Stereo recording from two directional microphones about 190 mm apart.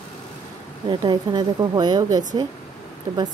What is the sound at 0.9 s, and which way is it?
A woman's voice, 25° right (ahead or behind).